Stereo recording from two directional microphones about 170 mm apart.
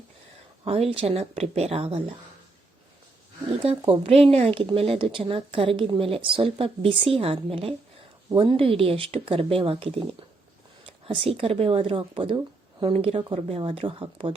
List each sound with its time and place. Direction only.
0.6 s a woman's voice: 35° right (ahead or behind)
3.8 s a woman's voice: 35° right (ahead or behind)